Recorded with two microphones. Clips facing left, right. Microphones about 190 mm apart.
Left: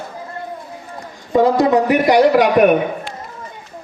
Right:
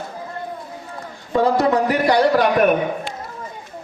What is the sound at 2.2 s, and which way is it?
Speech, 10° left (ahead or behind).